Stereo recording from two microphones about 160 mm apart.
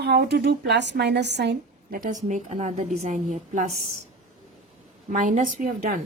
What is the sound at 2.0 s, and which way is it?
A woman's voice, 50° right (ahead or behind).